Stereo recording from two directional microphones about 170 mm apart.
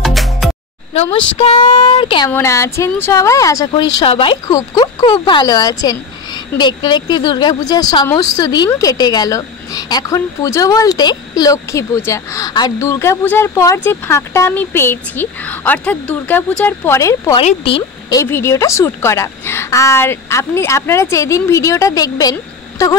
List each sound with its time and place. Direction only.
0.0 s music: centre (ahead or behind)
1.4 s speech: 35° left (ahead or behind)
2.3 s a woman's voice: 15° left (ahead or behind)
17.4 s speech: 35° left (ahead or behind)
18.2 s a woman's voice: 15° left (ahead or behind)